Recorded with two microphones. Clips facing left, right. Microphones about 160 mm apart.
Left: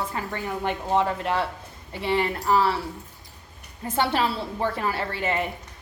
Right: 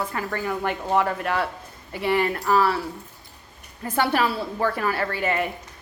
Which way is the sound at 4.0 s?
25° left (ahead or behind).